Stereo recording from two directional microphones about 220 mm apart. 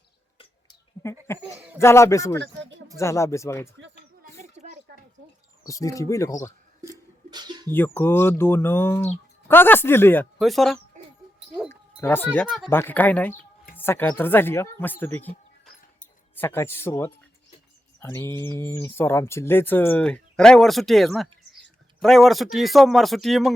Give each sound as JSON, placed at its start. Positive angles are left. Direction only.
{"t": 0.3, "sound": "a sound", "side_deg": 20}
{"t": 1.8, "sound": "speech", "side_deg": 10}
{"t": 2.4, "sound": "speech", "side_deg": -55}
{"t": 3.0, "sound": "speech", "side_deg": 15}
{"t": 4.6, "sound": "a sound", "side_deg": -30}
{"t": 5.6, "sound": "speech", "side_deg": 15}
{"t": 7.3, "sound": "bird", "side_deg": -20}
{"t": 7.7, "sound": "speech", "side_deg": 10}
{"t": 11.0, "sound": "a sound", "side_deg": -35}
{"t": 11.7, "sound": "a sound", "side_deg": 10}
{"t": 12.7, "sound": "speech", "side_deg": 10}
{"t": 16.3, "sound": "speech", "side_deg": 10}